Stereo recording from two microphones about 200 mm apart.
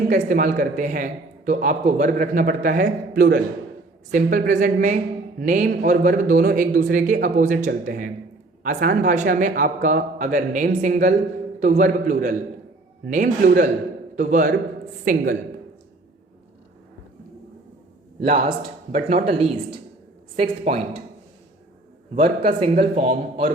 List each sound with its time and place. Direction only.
0.1 s a man's voice: 40° right (ahead or behind)
2.8 s speech: 55° right (ahead or behind)
4.1 s a man's voice: 45° right (ahead or behind)
18.3 s a man's voice: 30° right (ahead or behind)
22.1 s a man's voice: 35° right (ahead or behind)